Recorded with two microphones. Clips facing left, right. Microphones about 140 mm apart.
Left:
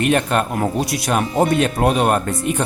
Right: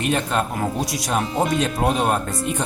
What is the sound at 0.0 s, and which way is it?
Speech, 65° left (ahead or behind).